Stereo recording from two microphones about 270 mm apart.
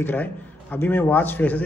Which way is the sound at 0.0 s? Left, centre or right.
Centre.